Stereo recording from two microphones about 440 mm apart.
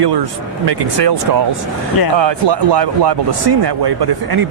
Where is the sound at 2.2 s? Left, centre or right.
Right.